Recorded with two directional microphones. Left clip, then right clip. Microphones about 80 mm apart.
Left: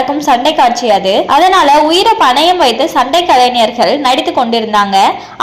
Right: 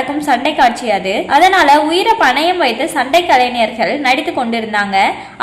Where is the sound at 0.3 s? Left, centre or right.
Left.